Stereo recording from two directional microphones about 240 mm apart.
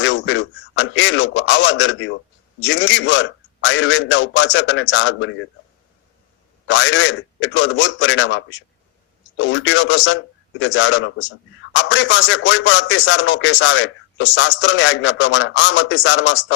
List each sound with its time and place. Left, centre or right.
0.0 s a man's voice: left
6.7 s a man's voice: left